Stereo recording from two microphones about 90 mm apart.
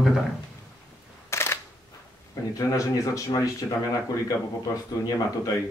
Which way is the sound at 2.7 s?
40° left (ahead or behind).